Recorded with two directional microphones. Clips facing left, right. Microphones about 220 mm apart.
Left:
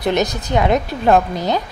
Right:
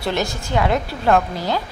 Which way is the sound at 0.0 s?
20° left (ahead or behind).